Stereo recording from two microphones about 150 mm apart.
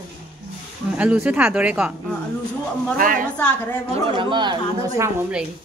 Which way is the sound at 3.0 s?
65° right (ahead or behind).